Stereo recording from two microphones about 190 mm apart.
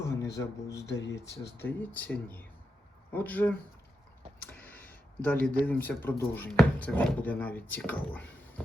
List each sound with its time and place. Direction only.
0.3 s speech: 15° left (ahead or behind)
0.9 s speech: 65° left (ahead or behind)
1.5 s speech: 10° left (ahead or behind)
4.6 s speech: 10° left (ahead or behind)